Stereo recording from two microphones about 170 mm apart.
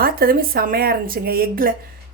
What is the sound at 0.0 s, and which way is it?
A woman's voice, 60° right (ahead or behind).